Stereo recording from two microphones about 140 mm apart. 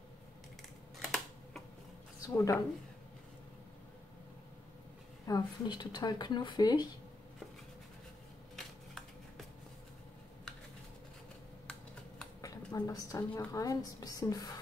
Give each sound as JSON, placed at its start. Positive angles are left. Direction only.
{"t": 0.9, "sound": "typing", "side_deg": 0}
{"t": 2.2, "sound": "a woman's voice", "side_deg": 25}
{"t": 5.2, "sound": "speech", "side_deg": 30}
{"t": 12.4, "sound": "a woman's voice", "side_deg": 25}